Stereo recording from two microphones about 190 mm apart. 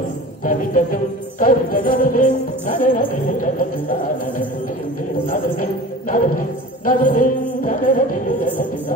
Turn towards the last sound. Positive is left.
turn(degrees=45)  # may be behind; listen again after turning